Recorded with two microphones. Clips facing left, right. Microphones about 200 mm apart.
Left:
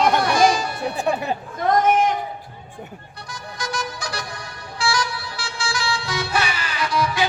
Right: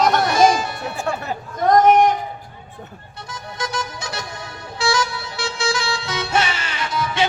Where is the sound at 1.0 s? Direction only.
20° left (ahead or behind).